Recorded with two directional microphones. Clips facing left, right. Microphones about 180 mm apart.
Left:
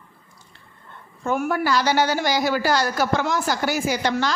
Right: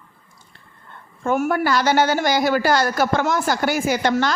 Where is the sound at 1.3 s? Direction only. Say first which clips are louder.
Right 3 dB; 50° right (ahead or behind).